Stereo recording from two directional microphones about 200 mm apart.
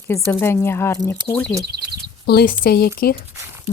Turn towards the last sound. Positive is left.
turn(degrees=50)  # may be behind; listen again after turning